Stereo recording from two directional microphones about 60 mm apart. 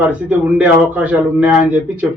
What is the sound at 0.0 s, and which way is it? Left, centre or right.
A man's voice, right.